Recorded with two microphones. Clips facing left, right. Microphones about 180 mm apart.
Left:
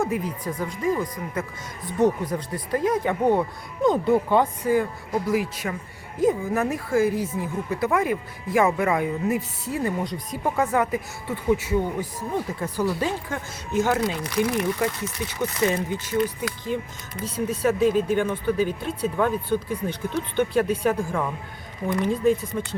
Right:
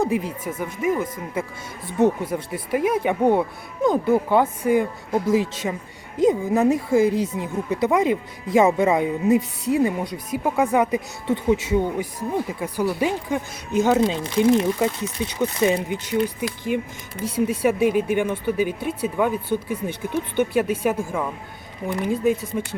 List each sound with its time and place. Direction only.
0.3 s speech: 25° right (ahead or behind)
1.3 s speech: 10° right (ahead or behind)
2.0 s speech: 25° right (ahead or behind)
2.3 s speech: 10° right (ahead or behind)
3.8 s speech: centre (ahead or behind)